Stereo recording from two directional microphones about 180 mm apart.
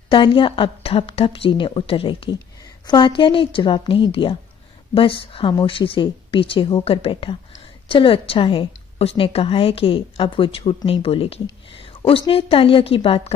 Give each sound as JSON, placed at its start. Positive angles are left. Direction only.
{"t": 0.1, "sound": "a woman's voice", "side_deg": 30}
{"t": 11.8, "sound": "a sound", "side_deg": 30}
{"t": 12.3, "sound": "a woman's voice", "side_deg": 30}